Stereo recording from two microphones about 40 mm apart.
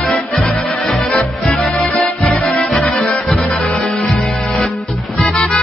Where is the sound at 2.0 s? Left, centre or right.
Left.